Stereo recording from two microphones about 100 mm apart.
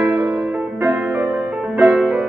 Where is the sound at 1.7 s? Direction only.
5° right (ahead or behind).